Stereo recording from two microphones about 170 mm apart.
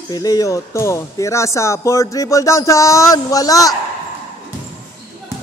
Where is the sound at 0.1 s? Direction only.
20° left (ahead or behind).